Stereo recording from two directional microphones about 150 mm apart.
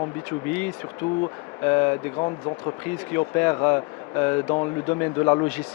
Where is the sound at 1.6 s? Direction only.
20° left (ahead or behind).